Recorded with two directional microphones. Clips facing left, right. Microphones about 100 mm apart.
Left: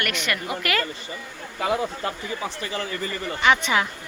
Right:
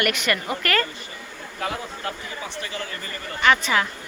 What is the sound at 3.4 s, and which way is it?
Speech, 15° left (ahead or behind).